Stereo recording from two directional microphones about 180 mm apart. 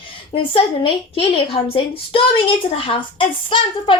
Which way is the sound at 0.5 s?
30° left (ahead or behind).